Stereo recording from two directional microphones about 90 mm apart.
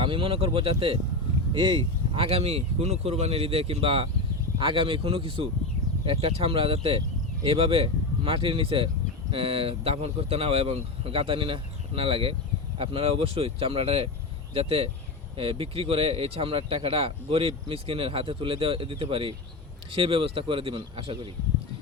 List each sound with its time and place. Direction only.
0.0 s speech: 80° right
1.5 s speech: 65° right (ahead or behind)
2.1 s speech: 90° right
4.6 s speech: 70° right (ahead or behind); by 21.2 s 90° right